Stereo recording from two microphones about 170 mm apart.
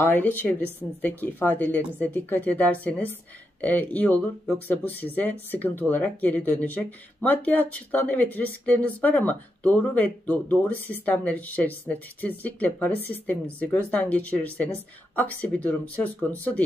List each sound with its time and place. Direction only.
0.0 s speech: 10° left (ahead or behind)